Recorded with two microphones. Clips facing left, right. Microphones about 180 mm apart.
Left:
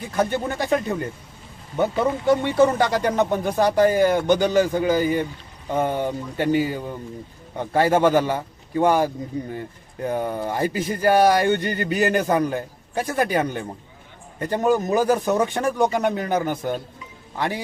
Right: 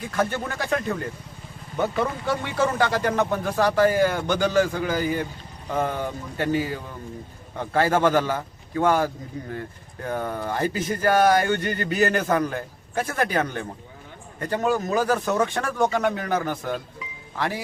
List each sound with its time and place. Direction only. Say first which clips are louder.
0.2 s speech: left 3 dB; 15° left (ahead or behind)